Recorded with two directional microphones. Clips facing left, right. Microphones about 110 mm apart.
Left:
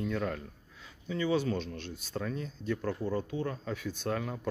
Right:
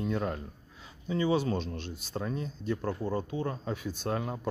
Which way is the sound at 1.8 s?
20° right (ahead or behind).